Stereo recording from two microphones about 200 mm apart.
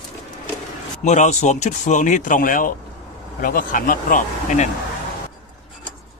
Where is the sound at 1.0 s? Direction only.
35° left (ahead or behind).